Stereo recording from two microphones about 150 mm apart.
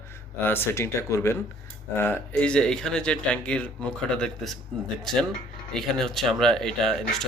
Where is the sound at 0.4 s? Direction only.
15° left (ahead or behind).